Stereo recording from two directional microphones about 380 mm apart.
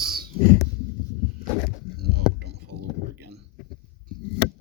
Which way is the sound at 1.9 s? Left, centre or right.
Right.